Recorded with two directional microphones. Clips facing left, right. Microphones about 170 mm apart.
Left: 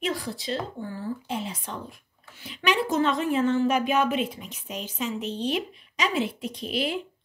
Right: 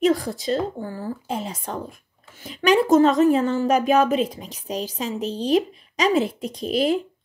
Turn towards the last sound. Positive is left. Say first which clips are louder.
# right 7 dB
turn(degrees=-40)  # may be behind; listen again after turning